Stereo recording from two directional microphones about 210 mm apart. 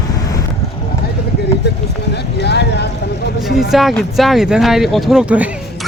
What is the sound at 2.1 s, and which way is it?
Vehicle, 55° left (ahead or behind).